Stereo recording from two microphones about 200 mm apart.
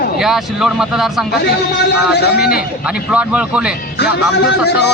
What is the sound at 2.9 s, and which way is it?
Speech, 5° right (ahead or behind).